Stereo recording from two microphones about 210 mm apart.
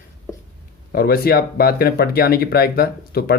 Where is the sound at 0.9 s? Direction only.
45° left (ahead or behind).